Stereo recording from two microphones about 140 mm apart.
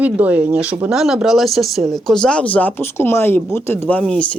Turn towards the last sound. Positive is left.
turn(degrees=5)  # may be behind; listen again after turning